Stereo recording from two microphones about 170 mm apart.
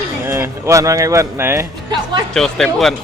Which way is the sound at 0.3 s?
15° right (ahead or behind).